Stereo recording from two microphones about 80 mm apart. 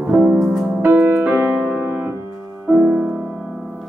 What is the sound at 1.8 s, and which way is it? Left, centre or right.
Piano, centre.